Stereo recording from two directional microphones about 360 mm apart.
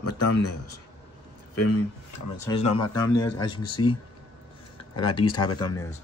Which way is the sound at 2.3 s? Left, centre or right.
Centre.